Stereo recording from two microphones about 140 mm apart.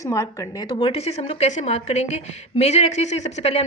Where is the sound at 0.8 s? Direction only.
45° left (ahead or behind).